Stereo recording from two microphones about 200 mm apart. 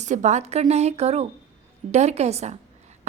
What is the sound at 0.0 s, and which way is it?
Speech, 35° right (ahead or behind).